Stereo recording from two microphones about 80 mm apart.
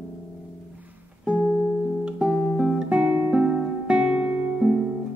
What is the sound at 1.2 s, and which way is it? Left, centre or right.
Music, centre.